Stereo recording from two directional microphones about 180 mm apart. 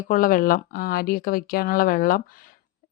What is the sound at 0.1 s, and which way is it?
Speech, 50° left (ahead or behind).